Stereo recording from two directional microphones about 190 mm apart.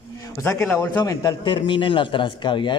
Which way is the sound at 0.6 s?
10° left (ahead or behind).